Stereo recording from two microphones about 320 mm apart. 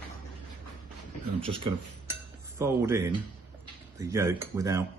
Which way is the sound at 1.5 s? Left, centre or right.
Centre.